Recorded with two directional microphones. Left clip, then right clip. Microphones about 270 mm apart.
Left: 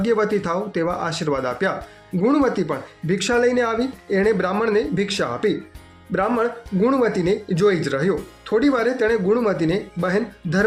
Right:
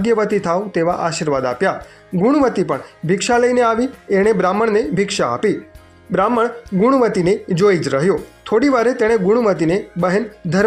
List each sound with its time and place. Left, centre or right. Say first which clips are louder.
0.0 s speech: right 4 dB; centre